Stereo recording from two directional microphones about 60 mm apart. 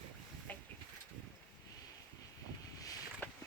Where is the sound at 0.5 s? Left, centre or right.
Left.